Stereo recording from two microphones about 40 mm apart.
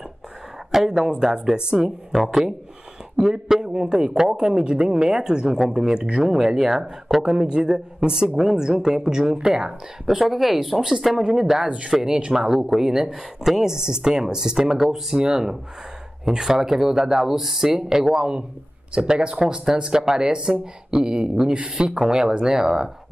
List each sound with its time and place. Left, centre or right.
0.8 s speech: centre
5.9 s speech: right
6.2 s speech: centre
11.6 s speech: right
11.9 s speech: centre
19.4 s speech: centre